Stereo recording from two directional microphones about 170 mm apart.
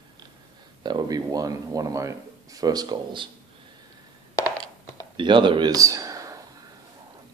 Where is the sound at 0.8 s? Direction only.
25° right (ahead or behind).